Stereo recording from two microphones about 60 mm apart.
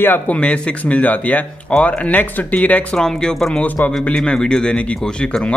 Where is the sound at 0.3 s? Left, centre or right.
Left.